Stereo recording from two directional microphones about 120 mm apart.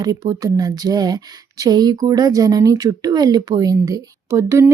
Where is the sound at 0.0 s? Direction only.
35° right (ahead or behind).